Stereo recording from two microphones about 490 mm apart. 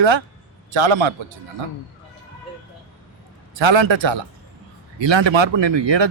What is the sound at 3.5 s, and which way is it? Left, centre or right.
Speech, right.